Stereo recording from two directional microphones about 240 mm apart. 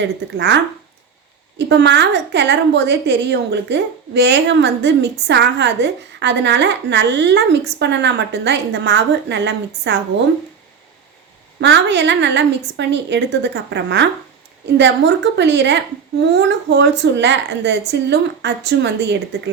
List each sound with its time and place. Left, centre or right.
0.3 s a woman's voice: right
11.6 s a woman's voice: right